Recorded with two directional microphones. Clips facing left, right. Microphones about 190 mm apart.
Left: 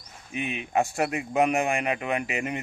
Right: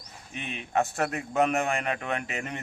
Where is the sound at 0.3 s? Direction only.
10° left (ahead or behind).